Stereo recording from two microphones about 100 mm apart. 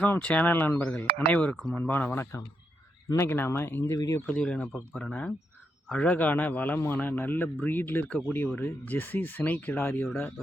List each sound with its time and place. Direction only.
0.0 s a man's voice: 15° left (ahead or behind)
0.8 s a man's voice: 10° left (ahead or behind)
3.9 s speech: 35° left (ahead or behind)
4.3 s a man's voice: 15° left (ahead or behind)